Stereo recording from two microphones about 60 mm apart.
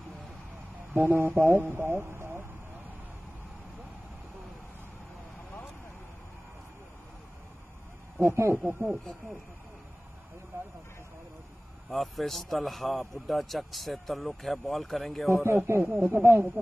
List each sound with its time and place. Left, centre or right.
0.9 s speech: right
1.9 s radio: right
8.5 s speech: right
11.9 s a man's voice: centre
15.2 s speech: right